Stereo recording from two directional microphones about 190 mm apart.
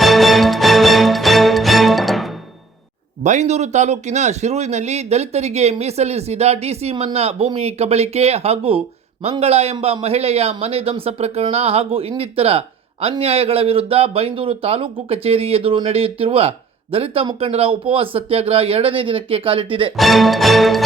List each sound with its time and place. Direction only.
0.0 s music: centre (ahead or behind)
3.2 s a man's voice: 35° right (ahead or behind)
20.0 s music: centre (ahead or behind)